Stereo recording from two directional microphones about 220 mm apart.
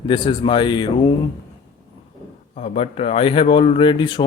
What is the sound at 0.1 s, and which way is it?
A man's voice, 20° left (ahead or behind).